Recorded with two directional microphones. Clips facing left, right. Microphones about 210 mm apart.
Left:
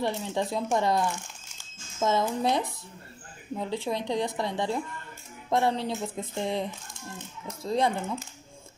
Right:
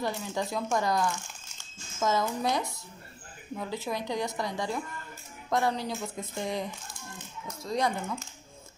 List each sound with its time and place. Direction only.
0.0 s a woman's voice: 30° left (ahead or behind)
7.6 s a woman's voice: 30° left (ahead or behind)